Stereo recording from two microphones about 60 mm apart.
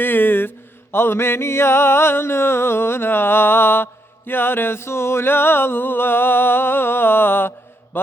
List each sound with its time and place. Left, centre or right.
0.0 s mantra: left
4.3 s music: left